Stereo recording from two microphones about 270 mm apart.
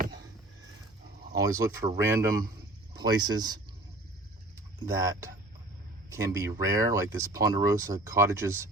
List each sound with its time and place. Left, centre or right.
1.4 s speech: centre